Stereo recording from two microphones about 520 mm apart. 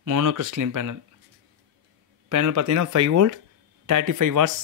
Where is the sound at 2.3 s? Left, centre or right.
Right.